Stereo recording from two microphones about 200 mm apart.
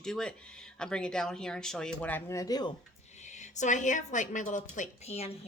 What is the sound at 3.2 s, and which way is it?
A woman's voice, 35° left (ahead or behind).